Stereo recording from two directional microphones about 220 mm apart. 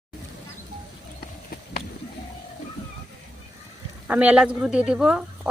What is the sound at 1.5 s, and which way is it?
Run, 40° left (ahead or behind).